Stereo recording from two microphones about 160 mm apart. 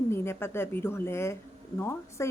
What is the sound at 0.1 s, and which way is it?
Speech, 15° left (ahead or behind).